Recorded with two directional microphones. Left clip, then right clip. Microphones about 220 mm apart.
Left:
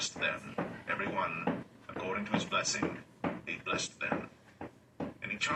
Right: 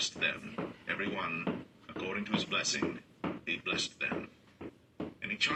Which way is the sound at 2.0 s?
45° right (ahead or behind).